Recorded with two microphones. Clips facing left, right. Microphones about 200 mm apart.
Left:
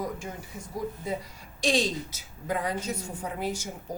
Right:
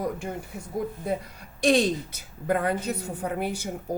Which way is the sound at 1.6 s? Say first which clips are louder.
Right 5 dB; 55° right (ahead or behind).